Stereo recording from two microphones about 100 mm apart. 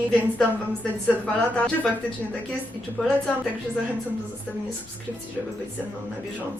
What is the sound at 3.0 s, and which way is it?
Speech, 15° left (ahead or behind).